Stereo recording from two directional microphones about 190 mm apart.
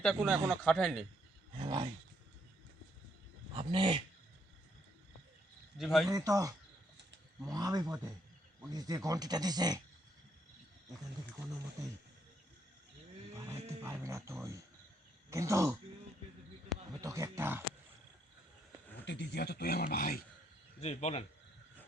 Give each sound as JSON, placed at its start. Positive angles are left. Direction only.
{"t": 0.0, "sound": "speech", "side_deg": 0}
{"t": 1.5, "sound": "speech", "side_deg": -25}
{"t": 3.5, "sound": "dog", "side_deg": -25}
{"t": 5.7, "sound": "speech", "side_deg": 0}
{"t": 6.1, "sound": "speech", "side_deg": -20}
{"t": 13.3, "sound": "music", "side_deg": -15}
{"t": 15.3, "sound": "speech", "side_deg": -15}
{"t": 16.9, "sound": "speech", "side_deg": -20}
{"t": 19.0, "sound": "speech", "side_deg": 65}
{"t": 20.8, "sound": "speech", "side_deg": 35}